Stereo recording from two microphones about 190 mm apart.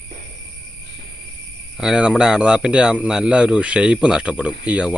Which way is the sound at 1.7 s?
5° right (ahead or behind).